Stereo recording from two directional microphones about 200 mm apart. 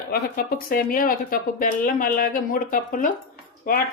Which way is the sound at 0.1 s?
45° left (ahead or behind).